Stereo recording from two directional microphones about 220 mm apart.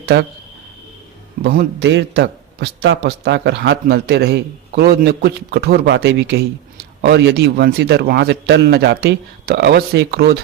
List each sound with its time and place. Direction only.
0.0 s speech: 50° right (ahead or behind)
1.5 s a man's voice: 50° right (ahead or behind)